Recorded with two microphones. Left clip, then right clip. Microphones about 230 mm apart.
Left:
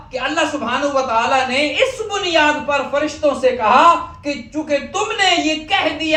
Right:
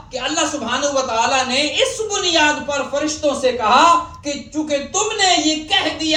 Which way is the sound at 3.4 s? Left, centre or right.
Centre.